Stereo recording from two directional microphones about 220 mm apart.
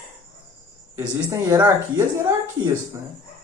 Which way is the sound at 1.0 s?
15° right (ahead or behind).